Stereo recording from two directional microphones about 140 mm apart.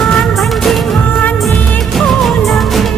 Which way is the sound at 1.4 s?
Centre (ahead or behind).